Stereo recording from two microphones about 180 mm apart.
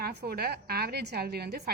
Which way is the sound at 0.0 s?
60° right (ahead or behind).